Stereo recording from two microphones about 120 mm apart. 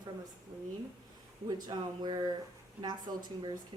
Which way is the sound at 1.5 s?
35° right (ahead or behind).